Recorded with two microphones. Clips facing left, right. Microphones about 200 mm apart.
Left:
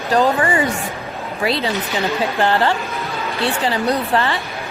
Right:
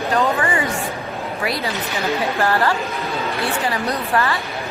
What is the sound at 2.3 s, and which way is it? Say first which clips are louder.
Speech: left 3 dB; 25° left (ahead or behind).